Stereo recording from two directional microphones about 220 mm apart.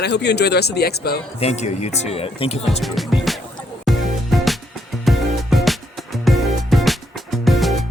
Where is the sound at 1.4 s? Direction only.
30° left (ahead or behind).